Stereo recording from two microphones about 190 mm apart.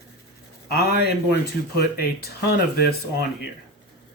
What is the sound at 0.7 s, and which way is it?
Speech, 55° left (ahead or behind).